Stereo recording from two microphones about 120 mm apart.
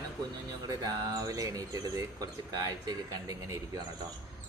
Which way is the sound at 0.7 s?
30° right (ahead or behind).